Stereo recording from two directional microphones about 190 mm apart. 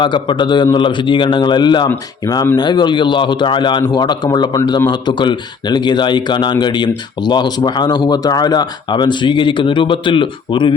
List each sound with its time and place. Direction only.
0.0 s speech: 25° left (ahead or behind)